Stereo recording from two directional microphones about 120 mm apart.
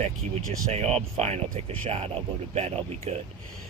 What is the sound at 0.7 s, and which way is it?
Speech, 60° right (ahead or behind).